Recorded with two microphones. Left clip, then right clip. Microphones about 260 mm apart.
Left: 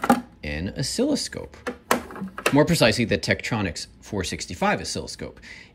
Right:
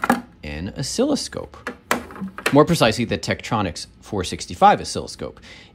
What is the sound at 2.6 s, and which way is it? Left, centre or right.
Speech, centre.